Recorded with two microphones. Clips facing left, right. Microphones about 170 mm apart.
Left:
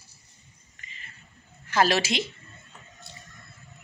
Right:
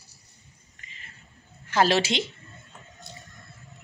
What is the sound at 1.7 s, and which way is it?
Speech, 30° right (ahead or behind).